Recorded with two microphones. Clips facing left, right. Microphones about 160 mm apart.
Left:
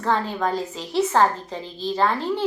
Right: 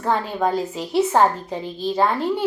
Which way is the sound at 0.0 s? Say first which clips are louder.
Right 2 dB; 15° right (ahead or behind).